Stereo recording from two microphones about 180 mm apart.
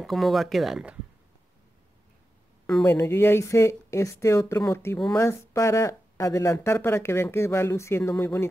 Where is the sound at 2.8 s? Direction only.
15° left (ahead or behind).